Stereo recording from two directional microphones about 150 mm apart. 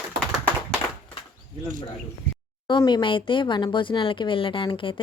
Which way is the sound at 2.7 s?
30° left (ahead or behind).